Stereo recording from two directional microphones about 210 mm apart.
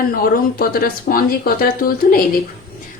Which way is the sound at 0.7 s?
45° left (ahead or behind).